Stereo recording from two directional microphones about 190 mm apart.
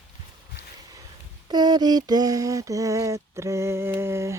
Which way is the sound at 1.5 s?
20° right (ahead or behind).